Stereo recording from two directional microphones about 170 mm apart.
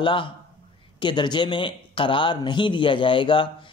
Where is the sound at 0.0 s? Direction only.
30° left (ahead or behind).